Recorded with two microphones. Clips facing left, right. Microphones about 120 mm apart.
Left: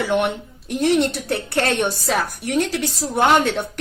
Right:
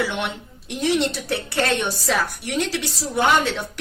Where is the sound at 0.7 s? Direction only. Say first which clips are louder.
Left 3 dB; 50° left (ahead or behind).